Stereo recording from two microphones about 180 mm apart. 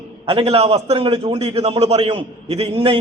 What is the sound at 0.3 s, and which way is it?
A man's voice, 30° right (ahead or behind).